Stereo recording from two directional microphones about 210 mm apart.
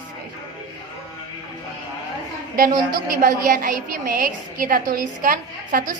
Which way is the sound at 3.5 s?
40° right (ahead or behind).